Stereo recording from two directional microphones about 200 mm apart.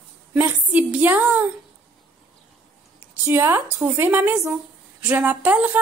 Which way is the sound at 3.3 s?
10° right (ahead or behind).